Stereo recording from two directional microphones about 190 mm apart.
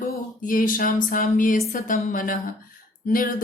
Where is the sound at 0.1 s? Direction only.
45° left (ahead or behind).